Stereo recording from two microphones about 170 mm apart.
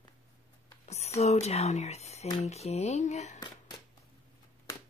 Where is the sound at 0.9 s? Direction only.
40° left (ahead or behind).